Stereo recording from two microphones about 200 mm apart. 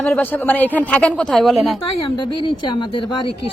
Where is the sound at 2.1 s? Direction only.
25° left (ahead or behind).